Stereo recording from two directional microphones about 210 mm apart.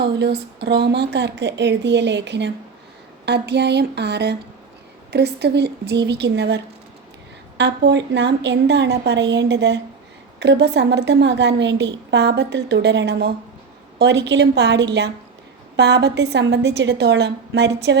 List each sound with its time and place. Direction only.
0.0 s a woman's voice: 50° right (ahead or behind)
7.6 s a woman's voice: 55° right (ahead or behind)